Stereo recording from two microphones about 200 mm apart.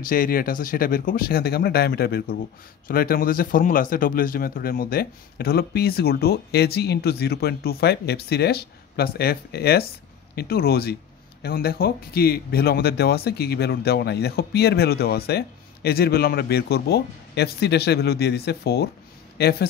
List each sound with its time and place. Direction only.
0.0 s speech: 45° left (ahead or behind)